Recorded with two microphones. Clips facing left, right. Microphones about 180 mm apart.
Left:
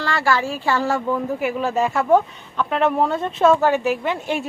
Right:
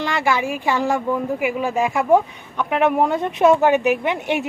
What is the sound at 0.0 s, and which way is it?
Speech, 20° right (ahead or behind).